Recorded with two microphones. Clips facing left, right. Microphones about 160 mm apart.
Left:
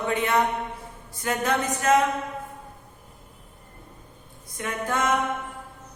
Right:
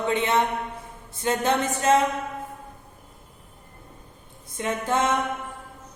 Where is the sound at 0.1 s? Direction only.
25° right (ahead or behind).